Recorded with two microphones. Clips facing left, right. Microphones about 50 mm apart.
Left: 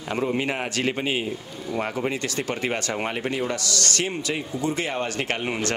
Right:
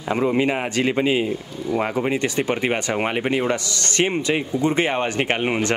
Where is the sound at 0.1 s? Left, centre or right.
Right.